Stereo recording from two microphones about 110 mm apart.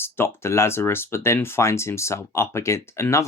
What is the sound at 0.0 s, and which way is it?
Speech, 20° left (ahead or behind).